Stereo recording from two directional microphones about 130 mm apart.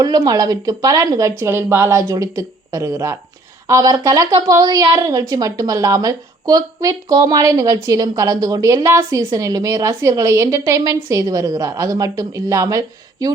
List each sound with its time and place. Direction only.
0.0 s speech: 30° right (ahead or behind)